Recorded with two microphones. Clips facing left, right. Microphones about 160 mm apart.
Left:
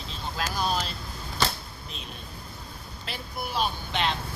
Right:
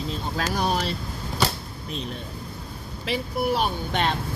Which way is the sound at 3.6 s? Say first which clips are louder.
Right 4 dB; 50° right (ahead or behind).